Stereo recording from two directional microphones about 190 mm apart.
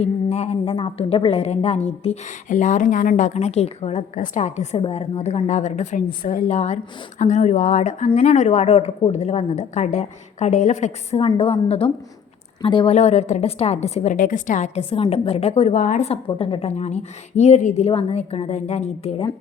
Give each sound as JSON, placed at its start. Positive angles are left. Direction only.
{"t": 0.0, "sound": "a woman's voice", "side_deg": 35}